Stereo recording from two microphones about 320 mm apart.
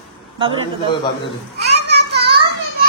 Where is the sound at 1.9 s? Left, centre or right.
Right.